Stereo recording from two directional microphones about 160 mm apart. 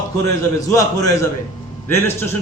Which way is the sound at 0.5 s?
20° left (ahead or behind).